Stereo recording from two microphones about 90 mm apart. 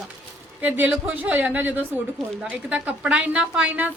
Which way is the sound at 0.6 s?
15° right (ahead or behind).